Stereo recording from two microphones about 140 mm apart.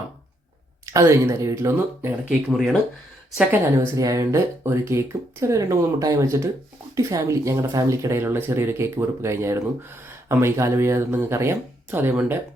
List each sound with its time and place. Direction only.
0.9 s speech: 20° right (ahead or behind)
2.5 s speech: 5° right (ahead or behind)
3.8 s speech: 20° right (ahead or behind)